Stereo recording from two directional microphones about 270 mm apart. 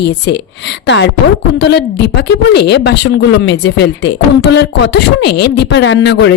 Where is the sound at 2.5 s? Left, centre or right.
Left.